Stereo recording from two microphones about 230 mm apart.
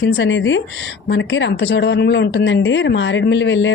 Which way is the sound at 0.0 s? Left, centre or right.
Left.